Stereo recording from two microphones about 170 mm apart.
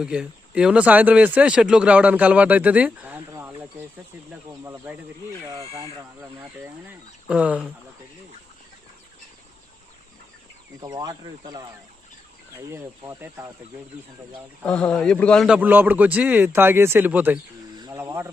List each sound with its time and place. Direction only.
0.0 s speech: 5° right (ahead or behind)
10.8 s speech: 20° right (ahead or behind)
12.7 s speech: 15° right (ahead or behind)
14.6 s speech: 5° left (ahead or behind)
17.7 s speech: 20° right (ahead or behind)